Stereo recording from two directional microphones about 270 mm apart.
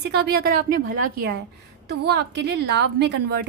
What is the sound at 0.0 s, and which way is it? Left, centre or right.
Speech, right.